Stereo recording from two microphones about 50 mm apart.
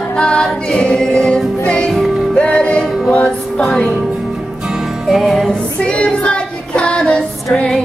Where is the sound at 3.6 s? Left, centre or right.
Centre.